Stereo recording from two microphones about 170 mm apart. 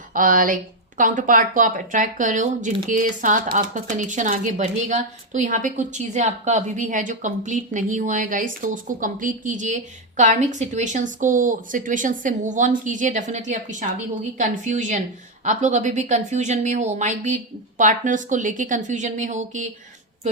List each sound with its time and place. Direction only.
0.1 s speech: 50° right (ahead or behind)